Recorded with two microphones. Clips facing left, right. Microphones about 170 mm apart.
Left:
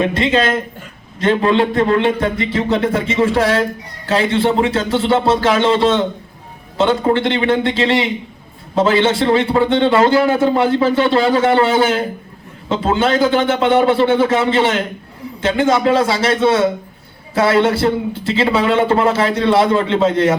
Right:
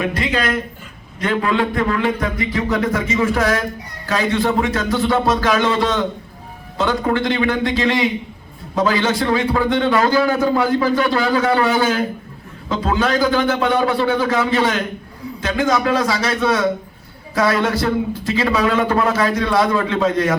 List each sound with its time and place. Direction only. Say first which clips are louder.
0.0 s a man's voice: left 5 dB; 25° left (ahead or behind)